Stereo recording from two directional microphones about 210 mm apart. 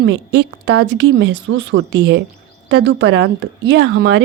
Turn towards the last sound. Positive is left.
turn(degrees=-50)  # may be behind; listen again after turning